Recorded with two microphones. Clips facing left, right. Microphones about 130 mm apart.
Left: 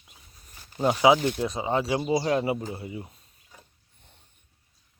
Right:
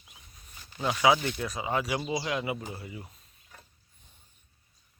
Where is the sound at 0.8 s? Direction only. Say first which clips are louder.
Left 7 dB; 35° left (ahead or behind).